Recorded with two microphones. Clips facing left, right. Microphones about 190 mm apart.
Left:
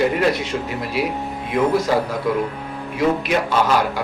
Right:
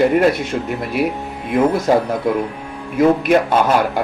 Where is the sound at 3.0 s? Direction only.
50° right (ahead or behind).